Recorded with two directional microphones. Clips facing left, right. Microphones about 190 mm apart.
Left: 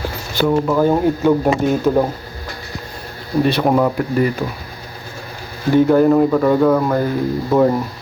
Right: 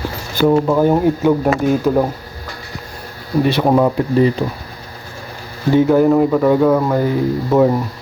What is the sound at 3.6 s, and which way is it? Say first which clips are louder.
Speech: right 3 dB; 15° right (ahead or behind).